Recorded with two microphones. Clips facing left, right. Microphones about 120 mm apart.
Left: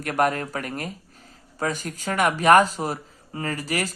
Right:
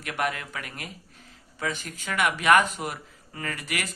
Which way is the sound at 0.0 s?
45° left (ahead or behind).